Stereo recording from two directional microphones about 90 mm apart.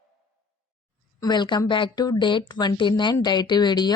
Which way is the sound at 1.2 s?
55° left (ahead or behind).